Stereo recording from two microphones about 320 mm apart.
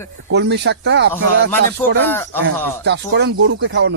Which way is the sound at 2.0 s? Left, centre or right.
Centre.